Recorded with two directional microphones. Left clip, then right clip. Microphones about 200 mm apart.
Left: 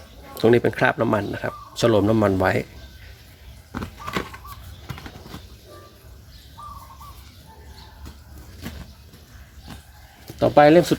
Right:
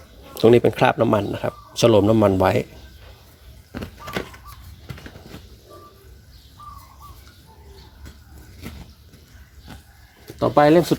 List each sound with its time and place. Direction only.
0.3 s speech: 15° right (ahead or behind)
3.7 s a sound: centre (ahead or behind)
10.3 s speech: centre (ahead or behind)